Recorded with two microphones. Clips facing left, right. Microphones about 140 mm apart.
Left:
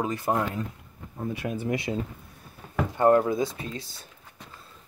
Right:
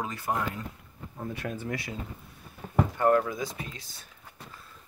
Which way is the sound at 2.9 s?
25° left (ahead or behind).